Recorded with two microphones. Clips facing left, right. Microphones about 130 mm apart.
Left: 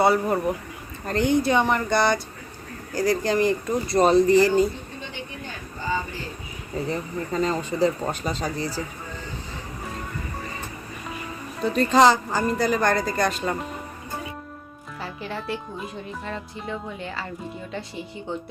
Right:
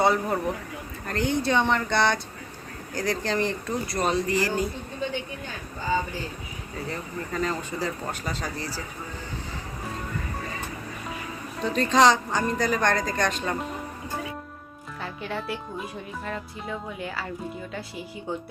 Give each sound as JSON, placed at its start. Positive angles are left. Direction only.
{"t": 0.0, "sound": "speech", "side_deg": 5}
{"t": 1.0, "sound": "speech", "side_deg": 20}
{"t": 3.8, "sound": "speech", "side_deg": 30}
{"t": 6.9, "sound": "speech", "side_deg": 25}
{"t": 11.6, "sound": "speech", "side_deg": 5}
{"t": 15.0, "sound": "speech", "side_deg": 0}